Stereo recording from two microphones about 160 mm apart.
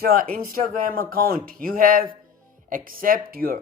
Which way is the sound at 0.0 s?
65° right (ahead or behind).